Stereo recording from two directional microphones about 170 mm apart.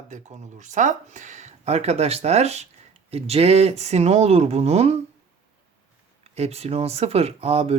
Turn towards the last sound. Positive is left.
turn(degrees=-35)  # may be behind; listen again after turning